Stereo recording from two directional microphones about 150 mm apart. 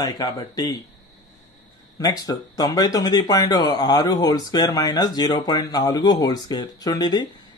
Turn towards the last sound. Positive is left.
turn(degrees=25)  # may be behind; listen again after turning